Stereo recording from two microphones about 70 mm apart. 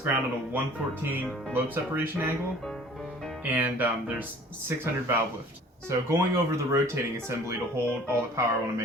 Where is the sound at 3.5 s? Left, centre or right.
Right.